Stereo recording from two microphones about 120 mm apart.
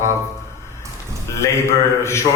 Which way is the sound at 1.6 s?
25° left (ahead or behind).